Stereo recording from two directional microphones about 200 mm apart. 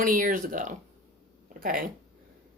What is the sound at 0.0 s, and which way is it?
Speech, 45° right (ahead or behind).